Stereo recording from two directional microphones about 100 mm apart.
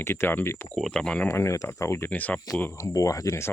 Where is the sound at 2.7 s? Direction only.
35° left (ahead or behind).